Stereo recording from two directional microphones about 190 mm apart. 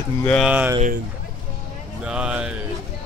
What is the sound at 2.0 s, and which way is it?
Speech, 5° right (ahead or behind).